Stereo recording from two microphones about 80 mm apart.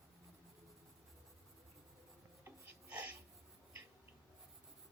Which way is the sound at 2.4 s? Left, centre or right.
Right.